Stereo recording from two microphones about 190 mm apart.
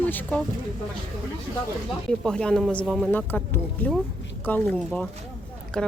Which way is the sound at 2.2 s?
5° left (ahead or behind).